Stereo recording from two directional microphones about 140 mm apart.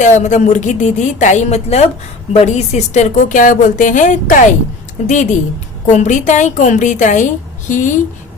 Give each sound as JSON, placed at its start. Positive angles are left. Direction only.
{"t": 0.0, "sound": "speech", "side_deg": 60}